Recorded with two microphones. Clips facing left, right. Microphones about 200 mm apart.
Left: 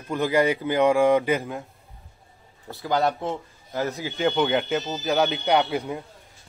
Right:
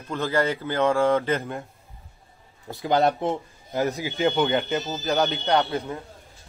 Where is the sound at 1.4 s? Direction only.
Centre (ahead or behind).